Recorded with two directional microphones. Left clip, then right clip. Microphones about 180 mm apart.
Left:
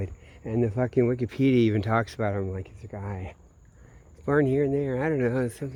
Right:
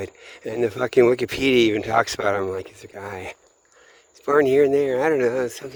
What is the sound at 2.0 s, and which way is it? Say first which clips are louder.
Speech: right 8 dB; 40° right (ahead or behind).